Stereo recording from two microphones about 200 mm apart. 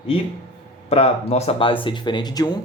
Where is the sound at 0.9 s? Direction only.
30° left (ahead or behind).